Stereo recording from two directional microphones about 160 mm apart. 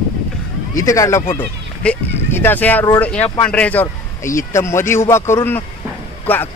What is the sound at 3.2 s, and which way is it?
Speech, 35° left (ahead or behind).